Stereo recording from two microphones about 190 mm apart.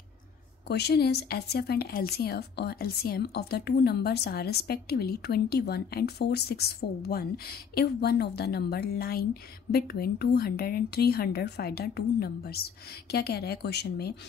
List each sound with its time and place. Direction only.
0.7 s a woman's voice: 60° left (ahead or behind)